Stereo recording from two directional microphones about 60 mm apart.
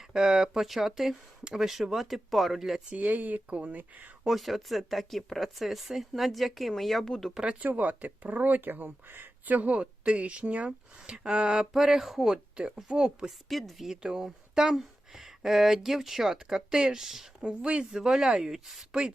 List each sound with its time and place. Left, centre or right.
0.1 s speech: centre
2.9 s speech: right
4.2 s speech: centre
7.6 s a woman's voice: right; by 13.3 s centre
13.5 s speech: centre
17.4 s a woman's voice: centre